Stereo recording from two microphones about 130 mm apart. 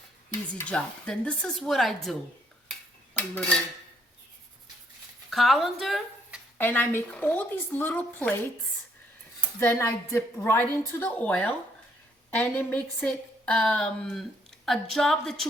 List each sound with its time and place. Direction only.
0.6 s a woman's voice: 5° left (ahead or behind)
3.2 s dishes: 10° left (ahead or behind)
5.3 s speech: centre (ahead or behind)
6.6 s a woman's voice: 15° left (ahead or behind)
9.6 s a woman's voice: 20° left (ahead or behind); by 15.4 s 5° left (ahead or behind)